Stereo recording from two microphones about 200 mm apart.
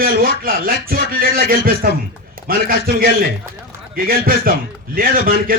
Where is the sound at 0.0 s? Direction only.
45° right (ahead or behind).